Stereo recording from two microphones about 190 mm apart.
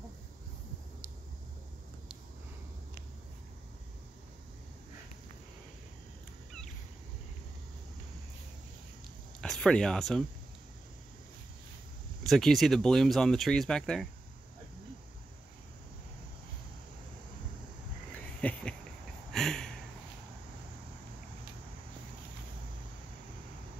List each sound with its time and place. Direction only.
9.4 s speech: 5° left (ahead or behind)
12.3 s speech: centre (ahead or behind)
18.4 s a sound: 5° left (ahead or behind)